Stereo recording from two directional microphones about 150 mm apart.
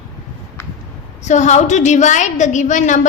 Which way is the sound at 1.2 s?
50° left (ahead or behind).